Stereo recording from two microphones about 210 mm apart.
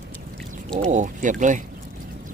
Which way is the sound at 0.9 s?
35° right (ahead or behind).